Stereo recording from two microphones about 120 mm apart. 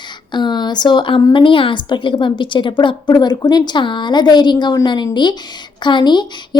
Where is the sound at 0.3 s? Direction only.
40° left (ahead or behind).